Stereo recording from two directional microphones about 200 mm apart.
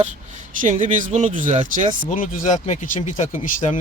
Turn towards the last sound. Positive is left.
turn(degrees=35)  # may be behind; listen again after turning